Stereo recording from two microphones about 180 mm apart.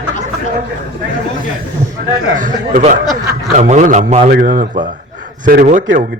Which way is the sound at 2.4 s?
45° right (ahead or behind).